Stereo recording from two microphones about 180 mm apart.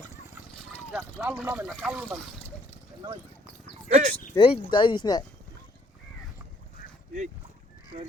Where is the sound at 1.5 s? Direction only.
10° right (ahead or behind).